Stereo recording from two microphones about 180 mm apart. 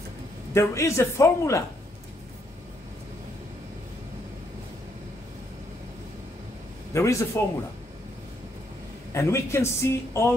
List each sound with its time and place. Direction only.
0.6 s speech: 15° left (ahead or behind)
6.9 s speech: 15° left (ahead or behind)
9.1 s speech: 15° left (ahead or behind)